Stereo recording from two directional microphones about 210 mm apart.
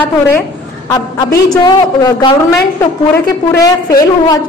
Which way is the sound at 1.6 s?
20° left (ahead or behind).